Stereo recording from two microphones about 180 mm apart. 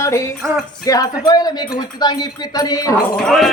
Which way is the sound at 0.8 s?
20° left (ahead or behind).